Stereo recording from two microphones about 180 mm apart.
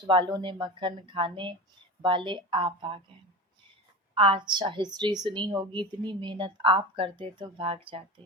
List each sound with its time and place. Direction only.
0.1 s a woman's voice: 25° right (ahead or behind)
4.1 s a woman's voice: 30° right (ahead or behind)